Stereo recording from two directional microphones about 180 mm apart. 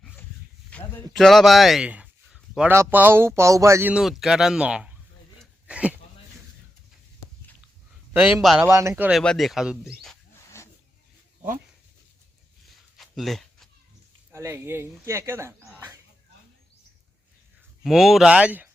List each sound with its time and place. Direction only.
0.9 s speech: centre (ahead or behind)
5.4 s a sound: 5° right (ahead or behind)
8.2 s speech: centre (ahead or behind)
8.6 s speech: 15° right (ahead or behind)
9.0 s speech: centre (ahead or behind)
10.5 s rub: 15° left (ahead or behind)
12.6 s a sound: centre (ahead or behind)
14.3 s speech: 15° right (ahead or behind)
17.8 s speech: centre (ahead or behind)